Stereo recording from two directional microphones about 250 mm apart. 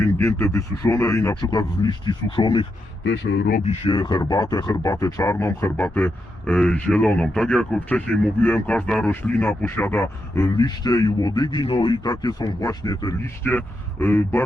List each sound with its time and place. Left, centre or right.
0.0 s speech: centre
3.0 s speech: left
3.7 s speech: centre